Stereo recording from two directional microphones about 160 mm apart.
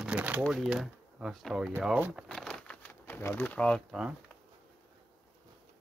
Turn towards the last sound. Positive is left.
turn(degrees=-5)  # may be behind; listen again after turning